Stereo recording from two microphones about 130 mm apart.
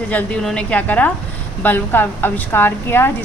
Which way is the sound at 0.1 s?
10° left (ahead or behind).